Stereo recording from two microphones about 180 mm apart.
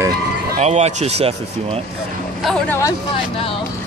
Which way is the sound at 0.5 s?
40° right (ahead or behind).